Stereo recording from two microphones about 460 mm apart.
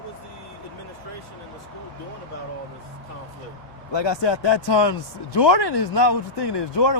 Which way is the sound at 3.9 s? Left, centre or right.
Left.